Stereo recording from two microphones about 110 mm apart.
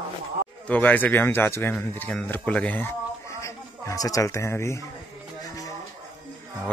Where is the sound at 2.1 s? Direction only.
10° left (ahead or behind).